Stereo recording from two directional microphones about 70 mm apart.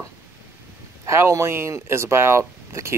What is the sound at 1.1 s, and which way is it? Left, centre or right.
Speech, right.